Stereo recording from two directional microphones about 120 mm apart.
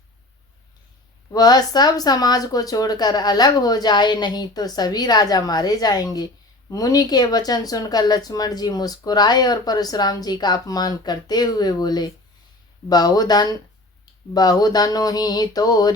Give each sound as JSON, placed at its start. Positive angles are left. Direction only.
{"t": 1.3, "sound": "speech", "side_deg": 35}